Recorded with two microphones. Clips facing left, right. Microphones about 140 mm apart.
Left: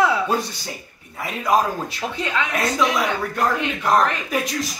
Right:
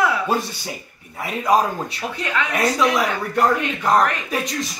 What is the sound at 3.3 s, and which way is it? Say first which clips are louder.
Speech: right 6 dB; centre (ahead or behind).